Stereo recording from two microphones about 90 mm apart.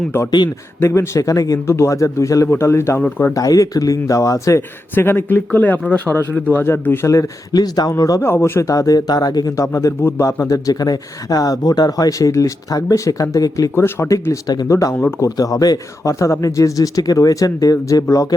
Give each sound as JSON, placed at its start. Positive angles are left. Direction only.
{"t": 0.3, "sound": "speech", "side_deg": 50}
{"t": 0.8, "sound": "speech", "side_deg": 30}
{"t": 3.3, "sound": "speech", "side_deg": 40}
{"t": 4.9, "sound": "speech", "side_deg": 25}
{"t": 8.2, "sound": "speech", "side_deg": 30}
{"t": 10.0, "sound": "speech", "side_deg": 25}
{"t": 10.3, "sound": "speech", "side_deg": 35}
{"t": 13.7, "sound": "speech", "side_deg": 30}